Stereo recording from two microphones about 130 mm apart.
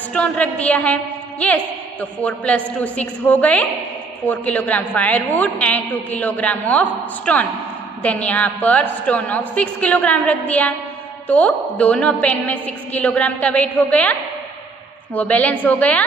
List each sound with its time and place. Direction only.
0.1 s a woman's voice: 10° left (ahead or behind)
15.1 s a woman's voice: 10° left (ahead or behind)